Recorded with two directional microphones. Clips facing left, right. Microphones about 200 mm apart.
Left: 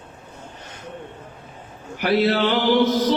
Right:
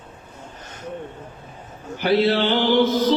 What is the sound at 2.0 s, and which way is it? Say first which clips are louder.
Mantra: right 1 dB; 25° right (ahead or behind).